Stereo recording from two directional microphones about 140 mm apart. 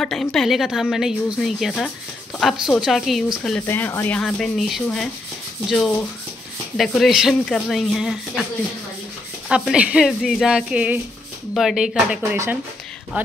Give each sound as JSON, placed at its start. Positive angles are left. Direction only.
{"t": 0.0, "sound": "a woman's voice", "side_deg": 5}
{"t": 3.6, "sound": "speech", "side_deg": 15}
{"t": 4.2, "sound": "a woman's voice", "side_deg": 0}
{"t": 9.5, "sound": "a woman's voice", "side_deg": -5}
{"t": 12.2, "sound": "speech", "side_deg": -15}